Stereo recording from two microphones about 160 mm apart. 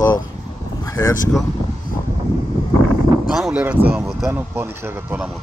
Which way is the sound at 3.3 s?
5° right (ahead or behind).